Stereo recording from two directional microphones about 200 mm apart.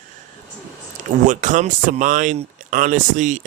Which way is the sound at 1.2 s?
40° right (ahead or behind).